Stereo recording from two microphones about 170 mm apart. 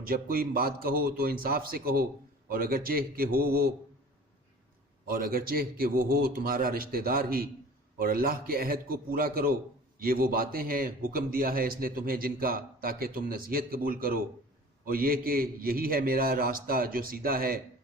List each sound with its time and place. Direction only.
0.0 s a man's voice: 60° right (ahead or behind)
5.0 s a man's voice: 60° right (ahead or behind)